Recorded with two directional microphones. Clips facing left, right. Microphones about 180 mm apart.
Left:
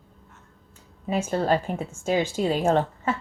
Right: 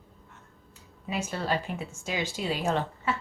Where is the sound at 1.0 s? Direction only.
45° left (ahead or behind).